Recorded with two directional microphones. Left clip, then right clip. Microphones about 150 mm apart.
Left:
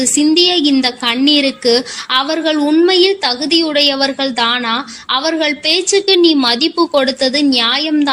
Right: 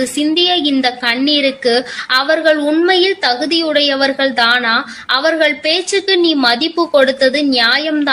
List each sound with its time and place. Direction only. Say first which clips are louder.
0.0 s a woman's voice: left 2 dB; 40° left (ahead or behind)